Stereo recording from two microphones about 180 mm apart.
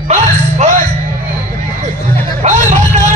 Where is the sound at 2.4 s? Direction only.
40° right (ahead or behind).